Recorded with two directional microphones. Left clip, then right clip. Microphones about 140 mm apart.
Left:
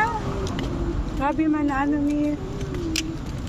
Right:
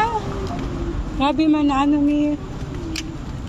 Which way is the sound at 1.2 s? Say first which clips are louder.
Right 5 dB; 55° right (ahead or behind).